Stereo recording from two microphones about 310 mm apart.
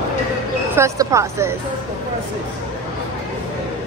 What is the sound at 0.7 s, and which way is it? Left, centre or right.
Speech, centre.